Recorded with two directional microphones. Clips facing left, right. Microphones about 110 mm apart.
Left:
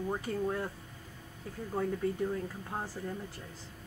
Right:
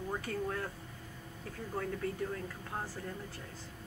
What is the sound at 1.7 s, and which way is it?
Speech, 15° left (ahead or behind).